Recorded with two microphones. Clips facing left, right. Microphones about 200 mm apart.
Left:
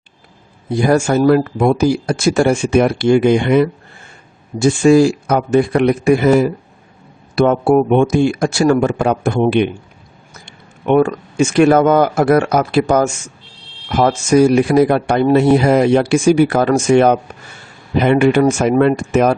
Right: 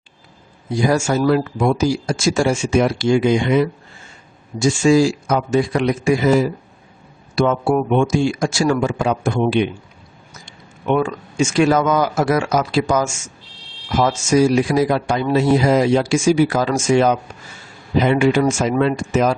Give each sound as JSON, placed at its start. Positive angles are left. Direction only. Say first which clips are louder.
{"t": 0.7, "sound": "speech", "louder": "left 4 dB", "side_deg": 55}